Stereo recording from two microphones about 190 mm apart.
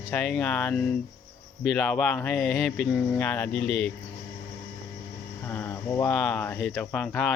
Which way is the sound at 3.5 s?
65° left (ahead or behind).